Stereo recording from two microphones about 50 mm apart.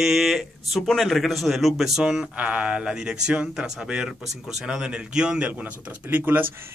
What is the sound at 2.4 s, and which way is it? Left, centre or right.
Speech, right.